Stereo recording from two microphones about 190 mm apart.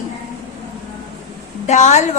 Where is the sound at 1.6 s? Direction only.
40° left (ahead or behind).